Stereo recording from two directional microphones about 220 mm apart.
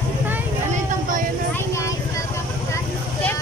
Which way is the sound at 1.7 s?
15° left (ahead or behind).